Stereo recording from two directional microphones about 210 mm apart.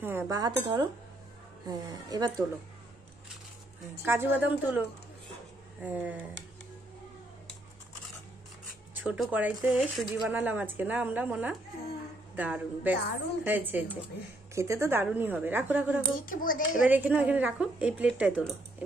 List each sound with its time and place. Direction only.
0.0 s a woman's voice: 10° right (ahead or behind)
4.0 s speech: 10° right (ahead or behind)
8.9 s speech: 5° right (ahead or behind)
16.3 s speech: 40° left (ahead or behind)
16.8 s speech: 5° right (ahead or behind)